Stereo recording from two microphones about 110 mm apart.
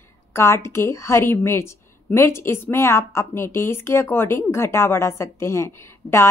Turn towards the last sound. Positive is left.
turn(degrees=25)  # may be behind; listen again after turning